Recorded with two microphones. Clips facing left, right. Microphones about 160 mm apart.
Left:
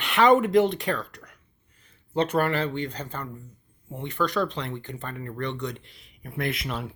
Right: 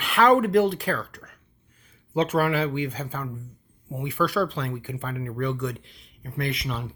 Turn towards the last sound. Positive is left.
turn(degrees=0)  # may be behind; listen again after turning